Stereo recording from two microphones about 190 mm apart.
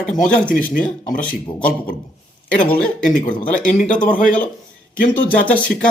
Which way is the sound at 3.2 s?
45° left (ahead or behind).